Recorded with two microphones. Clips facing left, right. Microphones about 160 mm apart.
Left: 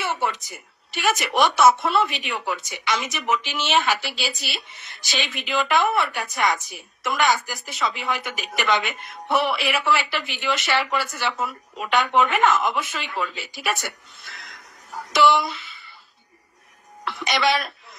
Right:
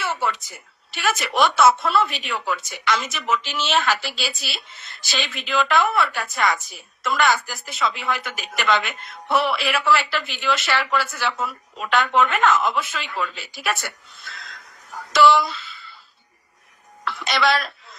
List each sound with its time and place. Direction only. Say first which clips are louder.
0.0 s a woman's voice: even; 15° left (ahead or behind)
17.0 s a woman's voice: right 1 dB; 15° left (ahead or behind)